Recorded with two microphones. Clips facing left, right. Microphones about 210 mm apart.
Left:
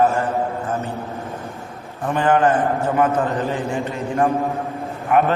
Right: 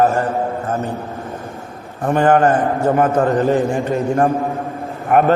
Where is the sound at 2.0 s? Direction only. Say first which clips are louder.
Right 4 dB; 45° right (ahead or behind).